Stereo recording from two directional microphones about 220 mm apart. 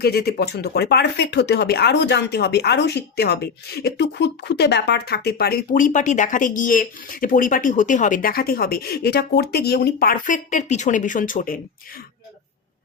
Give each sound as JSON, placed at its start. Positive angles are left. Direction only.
{"t": 0.0, "sound": "speech", "side_deg": 45}